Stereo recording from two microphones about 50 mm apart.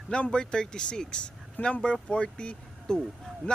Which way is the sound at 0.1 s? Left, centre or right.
Centre.